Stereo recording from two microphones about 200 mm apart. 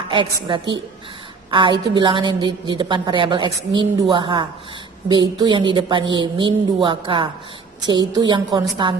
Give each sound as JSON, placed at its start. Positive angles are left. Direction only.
{"t": 0.1, "sound": "a woman's voice", "side_deg": -25}